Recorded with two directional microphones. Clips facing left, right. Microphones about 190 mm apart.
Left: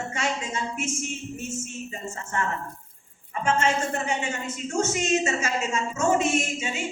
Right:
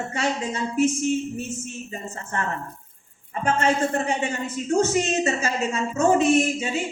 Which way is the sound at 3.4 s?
35° right (ahead or behind).